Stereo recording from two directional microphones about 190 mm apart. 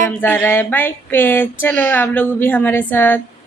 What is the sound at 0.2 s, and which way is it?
Speech, 10° left (ahead or behind).